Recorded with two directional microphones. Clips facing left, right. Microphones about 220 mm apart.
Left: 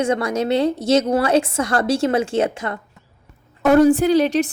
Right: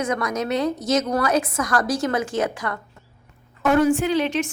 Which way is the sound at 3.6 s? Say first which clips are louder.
Left 5 dB; 35° left (ahead or behind).